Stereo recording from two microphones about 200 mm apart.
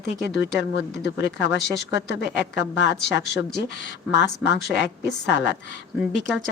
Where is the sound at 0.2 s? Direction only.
60° left (ahead or behind).